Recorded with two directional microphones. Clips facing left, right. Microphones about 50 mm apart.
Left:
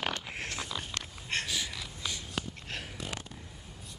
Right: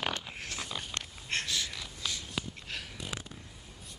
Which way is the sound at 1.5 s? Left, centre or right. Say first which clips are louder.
Even; centre.